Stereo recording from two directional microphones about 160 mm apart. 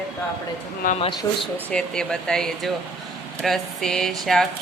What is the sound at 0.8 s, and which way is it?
Speech, 60° left (ahead or behind).